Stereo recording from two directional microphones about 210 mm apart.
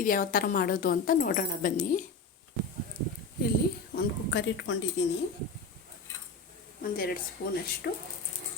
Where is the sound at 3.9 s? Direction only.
60° left (ahead or behind).